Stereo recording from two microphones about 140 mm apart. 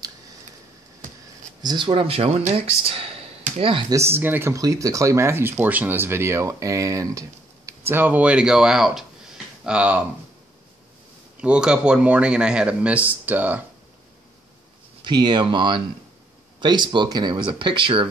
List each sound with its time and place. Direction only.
1.6 s speech: 30° right (ahead or behind)
3.9 s speech: 20° right (ahead or behind)
11.4 s speech: 5° right (ahead or behind)
15.0 s speech: 30° right (ahead or behind)